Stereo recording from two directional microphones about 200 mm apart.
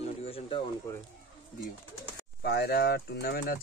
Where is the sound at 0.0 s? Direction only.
30° left (ahead or behind).